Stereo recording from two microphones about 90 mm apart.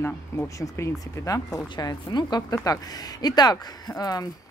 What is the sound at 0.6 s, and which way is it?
Speech, 35° left (ahead or behind).